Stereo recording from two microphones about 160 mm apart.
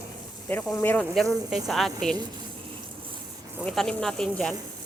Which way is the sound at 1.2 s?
Centre (ahead or behind).